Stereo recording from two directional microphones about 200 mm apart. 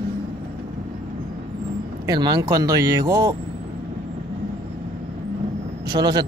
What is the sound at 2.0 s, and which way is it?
Speech, 20° right (ahead or behind).